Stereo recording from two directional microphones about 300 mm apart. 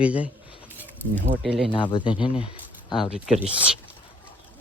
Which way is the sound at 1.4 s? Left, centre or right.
Centre.